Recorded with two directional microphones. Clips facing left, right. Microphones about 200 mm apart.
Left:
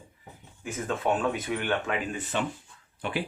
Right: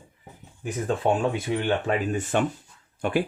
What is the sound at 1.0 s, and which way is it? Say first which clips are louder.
Speech: right 3 dB; 30° right (ahead or behind).